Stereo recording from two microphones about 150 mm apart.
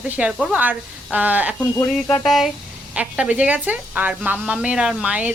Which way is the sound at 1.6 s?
15° left (ahead or behind).